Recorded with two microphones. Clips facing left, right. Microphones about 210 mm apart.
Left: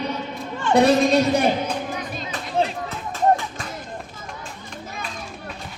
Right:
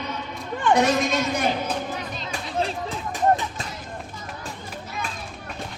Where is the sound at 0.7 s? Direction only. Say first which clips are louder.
Left 5 dB; 30° left (ahead or behind).